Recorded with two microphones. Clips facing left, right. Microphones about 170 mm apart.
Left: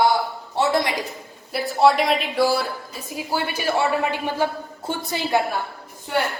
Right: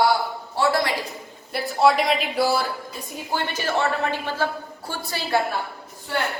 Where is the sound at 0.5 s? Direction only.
20° left (ahead or behind).